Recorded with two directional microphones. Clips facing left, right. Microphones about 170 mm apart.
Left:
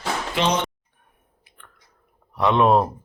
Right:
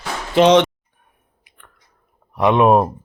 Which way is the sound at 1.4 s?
20° right (ahead or behind).